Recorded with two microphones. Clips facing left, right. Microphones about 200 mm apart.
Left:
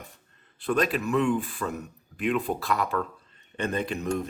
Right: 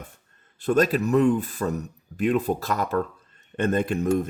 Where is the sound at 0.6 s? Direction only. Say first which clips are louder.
Right 5 dB; 40° right (ahead or behind).